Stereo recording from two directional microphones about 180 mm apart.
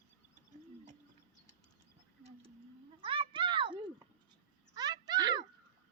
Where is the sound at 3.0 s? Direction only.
30° right (ahead or behind).